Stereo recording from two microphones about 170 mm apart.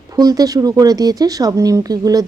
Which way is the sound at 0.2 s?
20° right (ahead or behind).